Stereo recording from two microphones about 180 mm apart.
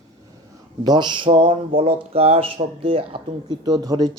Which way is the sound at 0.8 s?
25° right (ahead or behind).